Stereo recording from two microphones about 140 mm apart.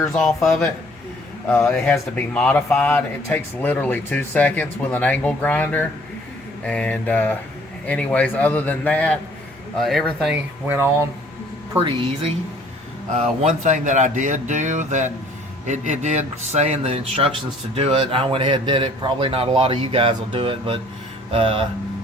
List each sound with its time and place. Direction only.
0.2 s speech: centre (ahead or behind)
1.8 s speech: 10° left (ahead or behind)
11.8 s speech: 40° right (ahead or behind)
13.1 s a man's voice: 60° right (ahead or behind); by 21.7 s 40° right (ahead or behind)